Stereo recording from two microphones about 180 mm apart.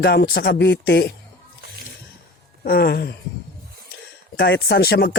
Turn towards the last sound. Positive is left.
turn(degrees=65)  # may be behind; listen again after turning